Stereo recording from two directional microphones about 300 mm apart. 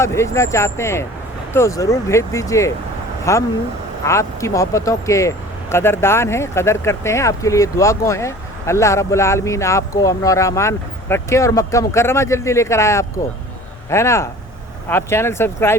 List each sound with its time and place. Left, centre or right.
0.0 s speech: centre